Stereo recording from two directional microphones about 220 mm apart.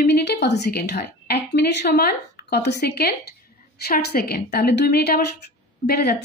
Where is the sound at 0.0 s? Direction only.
50° left (ahead or behind).